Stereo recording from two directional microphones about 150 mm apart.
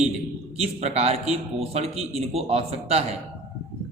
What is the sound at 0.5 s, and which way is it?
A man's voice, 45° right (ahead or behind).